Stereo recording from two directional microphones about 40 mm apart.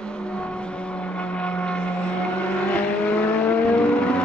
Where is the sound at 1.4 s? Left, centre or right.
Left.